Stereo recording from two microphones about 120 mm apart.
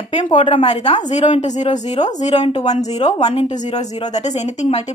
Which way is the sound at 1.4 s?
75° left (ahead or behind).